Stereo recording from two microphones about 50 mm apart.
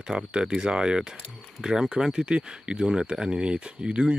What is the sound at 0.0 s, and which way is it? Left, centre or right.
Speech, centre.